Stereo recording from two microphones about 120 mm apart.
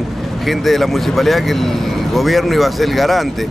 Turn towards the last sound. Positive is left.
turn(degrees=0)  # may be behind; listen again after turning